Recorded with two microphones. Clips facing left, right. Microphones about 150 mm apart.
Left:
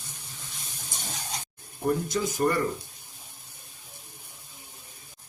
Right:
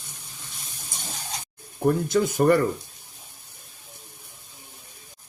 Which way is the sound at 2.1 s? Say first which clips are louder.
Right 7 dB; 70° right (ahead or behind).